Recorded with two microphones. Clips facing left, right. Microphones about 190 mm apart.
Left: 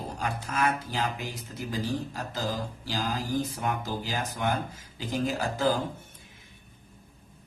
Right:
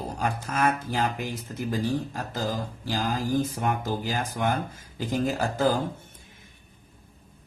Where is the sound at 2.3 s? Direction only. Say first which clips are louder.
Right 2 dB; 50° right (ahead or behind).